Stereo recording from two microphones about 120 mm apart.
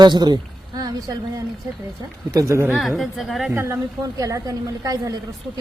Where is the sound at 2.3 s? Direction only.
25° right (ahead or behind).